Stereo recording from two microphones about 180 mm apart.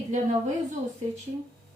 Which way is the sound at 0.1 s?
40° right (ahead or behind).